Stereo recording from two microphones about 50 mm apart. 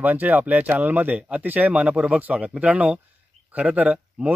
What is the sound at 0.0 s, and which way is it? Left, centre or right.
Speech, right.